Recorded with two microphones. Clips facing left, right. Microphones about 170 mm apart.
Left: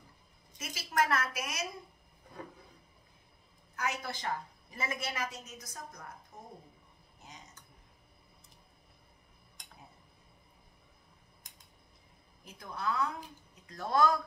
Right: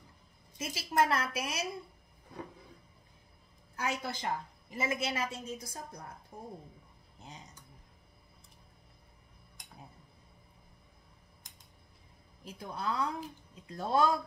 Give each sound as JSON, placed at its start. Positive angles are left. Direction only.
{"t": 0.6, "sound": "a woman's voice", "side_deg": -25}
{"t": 3.7, "sound": "a woman's voice", "side_deg": -25}
{"t": 12.4, "sound": "a woman's voice", "side_deg": -30}